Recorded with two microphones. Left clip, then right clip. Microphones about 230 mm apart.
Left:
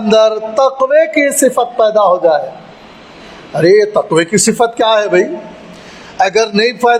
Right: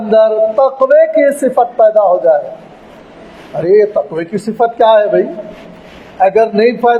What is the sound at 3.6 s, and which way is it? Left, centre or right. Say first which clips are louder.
A man's voice: left 1 dB; left.